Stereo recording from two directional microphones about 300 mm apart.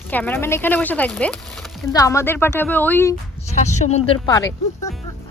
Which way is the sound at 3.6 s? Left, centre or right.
Left.